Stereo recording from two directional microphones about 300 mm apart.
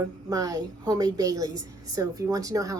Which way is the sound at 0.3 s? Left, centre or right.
Centre.